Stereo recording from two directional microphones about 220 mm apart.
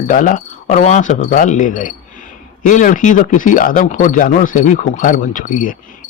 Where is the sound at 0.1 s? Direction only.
35° left (ahead or behind).